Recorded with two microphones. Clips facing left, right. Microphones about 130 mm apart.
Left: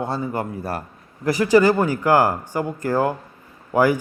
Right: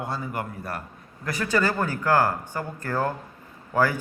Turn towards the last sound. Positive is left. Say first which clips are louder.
# left 6 dB
turn(degrees=15)  # may be behind; listen again after turning